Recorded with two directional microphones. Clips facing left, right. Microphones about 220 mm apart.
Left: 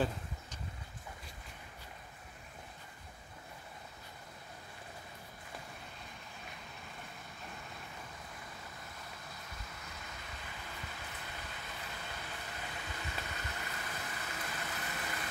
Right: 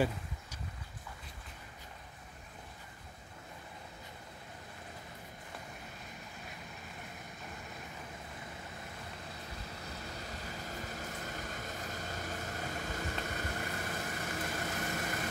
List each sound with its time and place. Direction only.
10.0 s vehicle: 40° right (ahead or behind)